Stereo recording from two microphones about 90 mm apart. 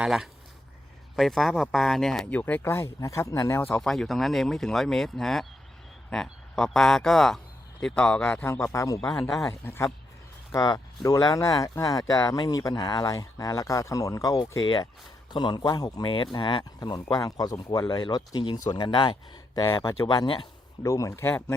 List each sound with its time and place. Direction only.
0.0 s speech: 5° right (ahead or behind)
2.3 s speech: 20° left (ahead or behind); by 3.6 s 35° left (ahead or behind)
3.7 s speech: 5° left (ahead or behind)
8.4 s speech: 30° left (ahead or behind)
9.0 s speech: 5° left (ahead or behind)
9.5 s speech: 30° left (ahead or behind)
10.5 s speech: 45° left (ahead or behind)
16.0 s speech: 75° left (ahead or behind); by 17.6 s 40° left (ahead or behind)
17.6 s speech: 60° left (ahead or behind)
18.3 s speech: 50° left (ahead or behind)
19.5 s speech: 50° left (ahead or behind)
20.1 s speech: 65° left (ahead or behind)
20.8 s speech: 35° left (ahead or behind)